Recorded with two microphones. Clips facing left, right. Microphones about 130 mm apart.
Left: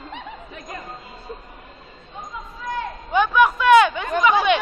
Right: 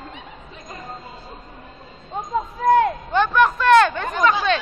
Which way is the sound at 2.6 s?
65° right (ahead or behind).